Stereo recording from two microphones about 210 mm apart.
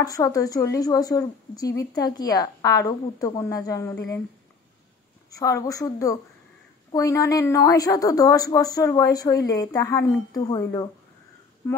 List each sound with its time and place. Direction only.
0.0 s a woman's voice: 15° left (ahead or behind)
5.3 s a woman's voice: 15° left (ahead or behind)